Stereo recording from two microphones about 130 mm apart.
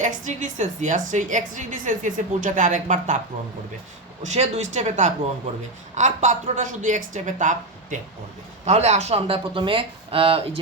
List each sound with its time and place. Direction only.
0.0 s a woman's voice: 70° right (ahead or behind)
4.2 s a man's voice: 60° right (ahead or behind)
8.6 s speech: 60° right (ahead or behind)